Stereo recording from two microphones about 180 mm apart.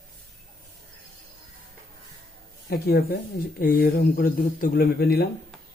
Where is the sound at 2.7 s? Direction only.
55° left (ahead or behind).